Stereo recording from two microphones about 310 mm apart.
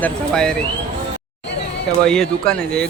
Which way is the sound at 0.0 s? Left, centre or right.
Centre.